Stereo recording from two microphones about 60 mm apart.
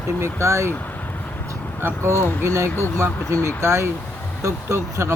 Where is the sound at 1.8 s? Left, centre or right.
Right.